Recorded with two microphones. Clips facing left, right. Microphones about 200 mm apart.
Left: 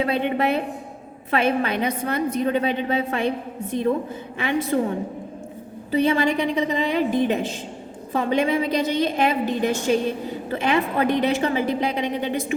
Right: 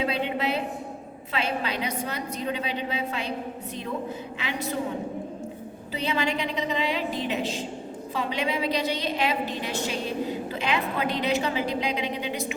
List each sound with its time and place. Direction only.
0.0 s a woman's voice: 50° left (ahead or behind)
6.0 s a woman's voice: 50° left (ahead or behind)